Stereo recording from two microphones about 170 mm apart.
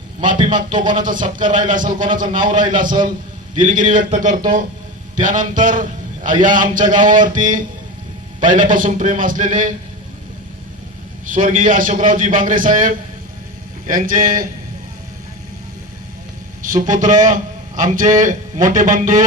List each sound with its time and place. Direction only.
0.8 s a man's voice: 50° right (ahead or behind)
11.3 s speech: 50° right (ahead or behind)
16.6 s a man's voice: 50° right (ahead or behind)